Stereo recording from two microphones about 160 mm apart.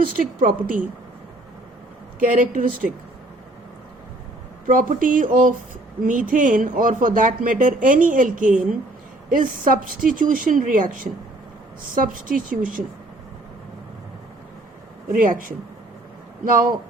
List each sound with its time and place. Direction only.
0.2 s speech: 55° right (ahead or behind)
2.1 s speech: 55° right (ahead or behind)
4.6 s speech: 55° right (ahead or behind)
15.1 s speech: 55° right (ahead or behind)